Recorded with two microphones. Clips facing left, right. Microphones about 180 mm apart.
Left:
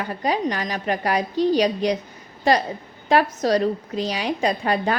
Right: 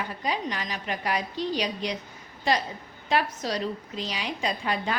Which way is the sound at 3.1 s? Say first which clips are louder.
Left 8 dB; 45° left (ahead or behind).